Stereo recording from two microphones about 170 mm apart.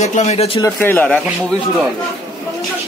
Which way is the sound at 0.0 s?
45° left (ahead or behind).